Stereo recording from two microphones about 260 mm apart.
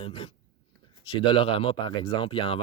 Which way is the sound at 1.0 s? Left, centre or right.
Centre.